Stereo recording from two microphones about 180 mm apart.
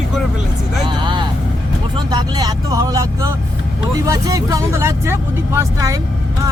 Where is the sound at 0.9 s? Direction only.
25° right (ahead or behind).